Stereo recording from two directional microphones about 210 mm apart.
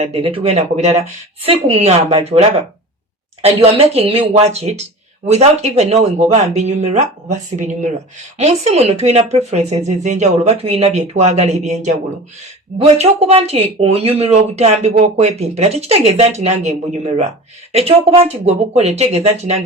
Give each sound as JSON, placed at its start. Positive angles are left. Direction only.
{"t": 0.0, "sound": "a woman's voice", "side_deg": -25}